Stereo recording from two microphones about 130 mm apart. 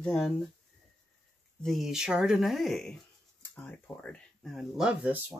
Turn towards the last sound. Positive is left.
turn(degrees=-10)  # may be behind; listen again after turning